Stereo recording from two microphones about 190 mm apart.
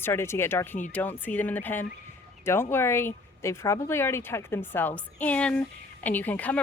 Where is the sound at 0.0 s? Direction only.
10° left (ahead or behind).